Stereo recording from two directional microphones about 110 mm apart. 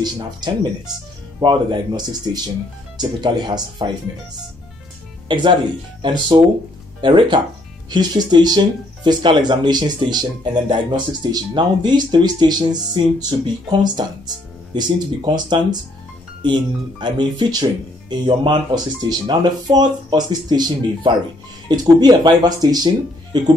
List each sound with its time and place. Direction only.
0.0 s speech: 40° right (ahead or behind)
5.3 s speech: 45° right (ahead or behind)
17.0 s speech: 40° right (ahead or behind)